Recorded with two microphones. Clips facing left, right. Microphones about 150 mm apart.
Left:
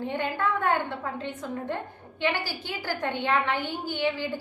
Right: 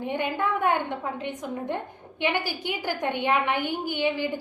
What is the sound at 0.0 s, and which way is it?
A woman's voice, 15° right (ahead or behind).